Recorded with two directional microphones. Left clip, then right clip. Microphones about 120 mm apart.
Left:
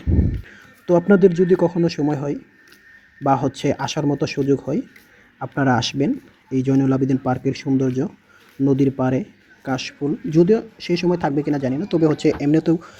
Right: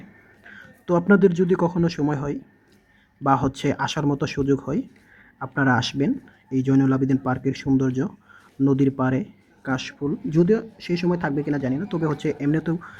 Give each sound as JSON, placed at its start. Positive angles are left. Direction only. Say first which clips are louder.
{"t": 0.5, "sound": "a sound", "louder": "left 5 dB", "side_deg": 20}
{"t": 1.3, "sound": "speech", "louder": "left 4 dB", "side_deg": 15}
{"t": 5.4, "sound": "speech", "louder": "left 2 dB", "side_deg": 30}